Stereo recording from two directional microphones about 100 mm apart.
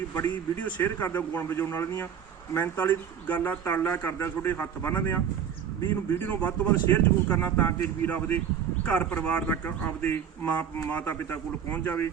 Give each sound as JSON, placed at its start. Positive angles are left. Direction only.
{"t": 0.1, "sound": "a man's voice", "side_deg": 20}